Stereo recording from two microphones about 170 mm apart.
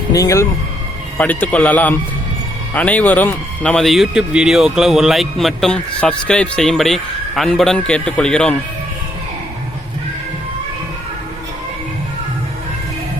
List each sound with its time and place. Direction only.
0.1 s speech: 20° left (ahead or behind)
1.2 s a man's voice: 10° left (ahead or behind)